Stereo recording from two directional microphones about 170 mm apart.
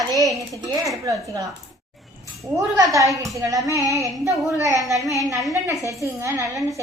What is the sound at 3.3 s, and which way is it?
A child's voice, 20° right (ahead or behind).